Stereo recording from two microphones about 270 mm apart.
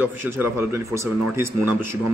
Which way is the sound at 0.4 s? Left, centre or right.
Centre.